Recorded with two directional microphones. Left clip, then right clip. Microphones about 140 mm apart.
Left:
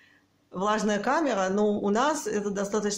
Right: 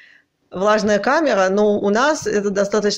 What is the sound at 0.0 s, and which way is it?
Speech, 30° right (ahead or behind).